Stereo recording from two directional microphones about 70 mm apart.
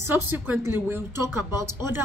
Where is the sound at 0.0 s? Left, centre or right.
Right.